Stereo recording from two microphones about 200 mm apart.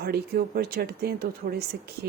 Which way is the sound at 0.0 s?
50° right (ahead or behind).